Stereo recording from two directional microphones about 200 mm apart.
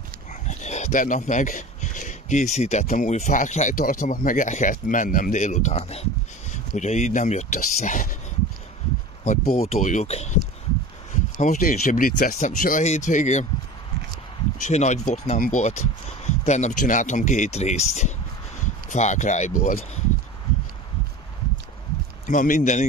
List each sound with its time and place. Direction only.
0.3 s speech: 35° left (ahead or behind)
9.5 s speech: 30° left (ahead or behind)
11.4 s speech: 40° left (ahead or behind)
14.6 s speech: 35° left (ahead or behind)
22.2 s speech: 40° left (ahead or behind)